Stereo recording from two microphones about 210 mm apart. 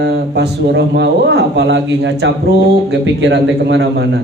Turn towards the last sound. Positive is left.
turn(degrees=-55)  # may be behind; listen again after turning